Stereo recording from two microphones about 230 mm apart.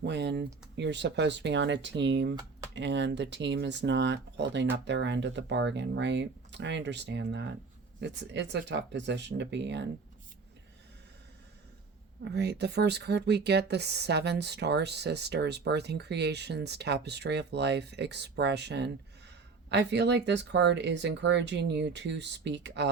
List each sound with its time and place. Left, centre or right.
0.0 s speech: right
12.2 s speech: right